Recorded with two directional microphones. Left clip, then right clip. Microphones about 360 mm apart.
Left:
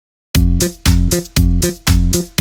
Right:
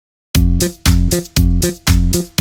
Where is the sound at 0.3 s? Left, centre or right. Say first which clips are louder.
Even; centre.